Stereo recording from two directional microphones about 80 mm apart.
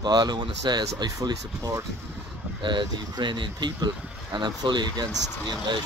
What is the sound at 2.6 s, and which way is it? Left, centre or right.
Speech, right.